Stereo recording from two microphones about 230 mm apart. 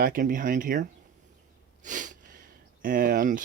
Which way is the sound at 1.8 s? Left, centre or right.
Right.